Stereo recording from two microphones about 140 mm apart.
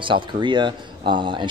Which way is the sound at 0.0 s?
35° right (ahead or behind).